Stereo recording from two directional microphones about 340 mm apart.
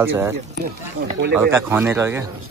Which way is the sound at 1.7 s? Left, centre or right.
Centre.